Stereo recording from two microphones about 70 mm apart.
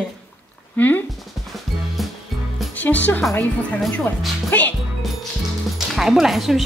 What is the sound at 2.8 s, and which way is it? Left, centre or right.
Speech, left.